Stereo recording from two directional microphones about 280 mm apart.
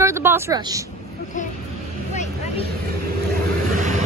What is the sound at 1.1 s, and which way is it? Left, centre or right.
Speech, left.